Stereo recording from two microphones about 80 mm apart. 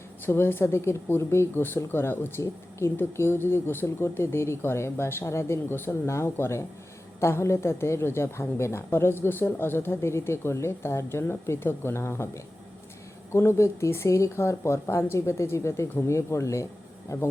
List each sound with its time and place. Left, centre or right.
0.3 s speech: left